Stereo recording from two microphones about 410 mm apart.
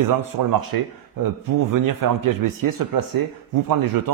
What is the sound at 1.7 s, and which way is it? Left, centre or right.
Speech, right.